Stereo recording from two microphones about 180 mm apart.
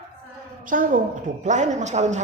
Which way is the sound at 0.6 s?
50° right (ahead or behind).